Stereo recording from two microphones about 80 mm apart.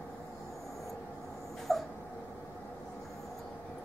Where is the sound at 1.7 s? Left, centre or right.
Centre.